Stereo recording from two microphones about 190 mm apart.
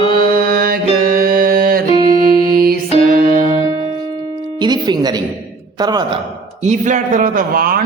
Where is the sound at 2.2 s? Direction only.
50° right (ahead or behind).